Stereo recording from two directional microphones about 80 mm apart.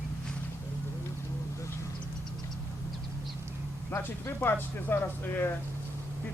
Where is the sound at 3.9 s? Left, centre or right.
Left.